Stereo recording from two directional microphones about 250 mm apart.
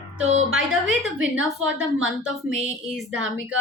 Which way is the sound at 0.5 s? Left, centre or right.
Centre.